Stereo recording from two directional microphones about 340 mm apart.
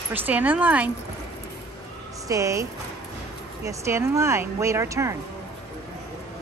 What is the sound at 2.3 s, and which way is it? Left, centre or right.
Speech, centre.